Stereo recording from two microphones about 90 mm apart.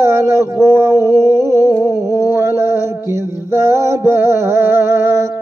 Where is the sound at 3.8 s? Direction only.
30° right (ahead or behind).